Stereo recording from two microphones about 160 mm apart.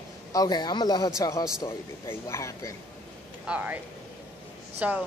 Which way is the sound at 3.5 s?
10° right (ahead or behind).